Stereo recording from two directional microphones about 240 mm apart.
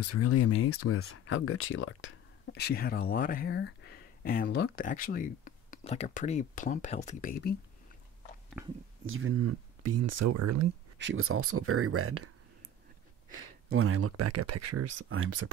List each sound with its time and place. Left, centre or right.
0.0 s speech: left
9.0 s speech: right
11.0 s speech: right
13.7 s speech: right